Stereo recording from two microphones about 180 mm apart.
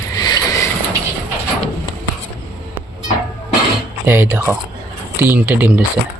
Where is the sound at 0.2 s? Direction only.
20° left (ahead or behind).